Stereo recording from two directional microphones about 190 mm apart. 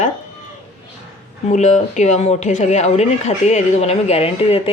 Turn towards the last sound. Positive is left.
turn(degrees=30)  # may be behind; listen again after turning